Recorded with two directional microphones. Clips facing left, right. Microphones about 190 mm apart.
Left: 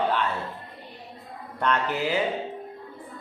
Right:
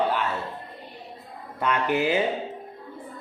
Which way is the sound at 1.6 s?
15° right (ahead or behind).